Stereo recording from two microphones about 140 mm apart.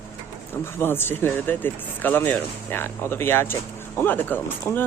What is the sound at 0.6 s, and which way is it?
Speech, 15° left (ahead or behind).